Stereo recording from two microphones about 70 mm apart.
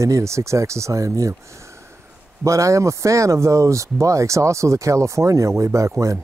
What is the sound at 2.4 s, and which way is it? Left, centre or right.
Speech, right.